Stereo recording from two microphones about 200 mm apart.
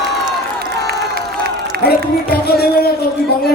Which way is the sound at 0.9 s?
50° right (ahead or behind).